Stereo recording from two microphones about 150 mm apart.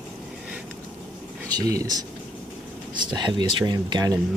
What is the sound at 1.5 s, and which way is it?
Speech, 25° right (ahead or behind).